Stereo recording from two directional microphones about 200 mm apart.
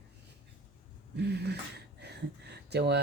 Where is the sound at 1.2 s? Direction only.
55° right (ahead or behind).